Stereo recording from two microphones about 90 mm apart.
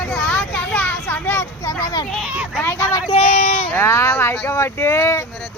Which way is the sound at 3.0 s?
90° left.